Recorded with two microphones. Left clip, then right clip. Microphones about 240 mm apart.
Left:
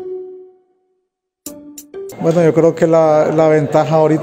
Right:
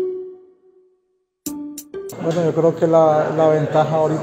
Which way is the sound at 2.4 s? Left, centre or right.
Left.